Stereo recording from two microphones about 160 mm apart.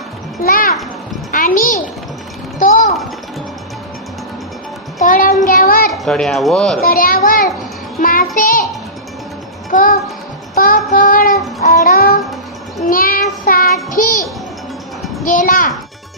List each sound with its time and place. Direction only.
0.4 s a sound: 60° left (ahead or behind)
5.0 s child singing: 60° left (ahead or behind)
5.9 s speech: 5° left (ahead or behind)
6.8 s a child's voice: 65° left (ahead or behind)
8.0 s music: 60° left (ahead or behind)
9.6 s music: 60° left (ahead or behind)
10.5 s child singing: 60° left (ahead or behind)
13.4 s a child's voice: 65° left (ahead or behind)
15.2 s a child's voice: 55° left (ahead or behind)